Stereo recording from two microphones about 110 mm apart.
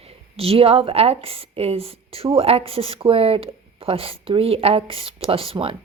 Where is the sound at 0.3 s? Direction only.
60° right (ahead or behind).